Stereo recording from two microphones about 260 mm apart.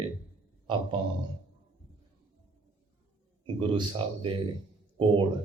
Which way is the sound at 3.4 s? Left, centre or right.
Centre.